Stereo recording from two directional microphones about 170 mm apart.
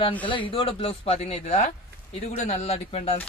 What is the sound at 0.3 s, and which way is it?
Speech, 30° left (ahead or behind).